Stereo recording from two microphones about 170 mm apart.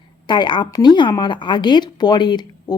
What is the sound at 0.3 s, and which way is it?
Speech, 25° left (ahead or behind).